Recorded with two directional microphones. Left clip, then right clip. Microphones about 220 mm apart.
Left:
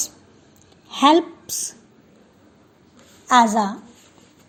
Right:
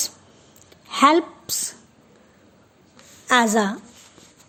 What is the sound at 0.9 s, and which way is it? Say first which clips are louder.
Speech: left 1 dB; 20° right (ahead or behind).